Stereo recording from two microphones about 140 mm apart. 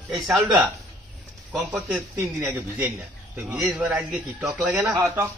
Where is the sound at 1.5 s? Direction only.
10° right (ahead or behind).